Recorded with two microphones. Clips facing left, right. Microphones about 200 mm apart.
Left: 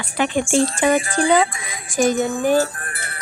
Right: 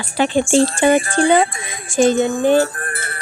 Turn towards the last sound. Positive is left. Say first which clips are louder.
# right 6 dB
turn(degrees=-45)  # may be behind; listen again after turning